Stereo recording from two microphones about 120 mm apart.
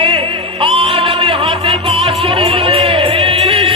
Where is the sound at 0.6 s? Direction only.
50° right (ahead or behind).